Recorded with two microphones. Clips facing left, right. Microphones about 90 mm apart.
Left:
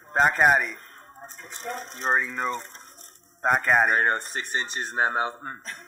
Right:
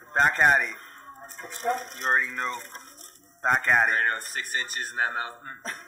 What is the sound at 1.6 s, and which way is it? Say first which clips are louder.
Speech: right 7 dB; 30° right (ahead or behind).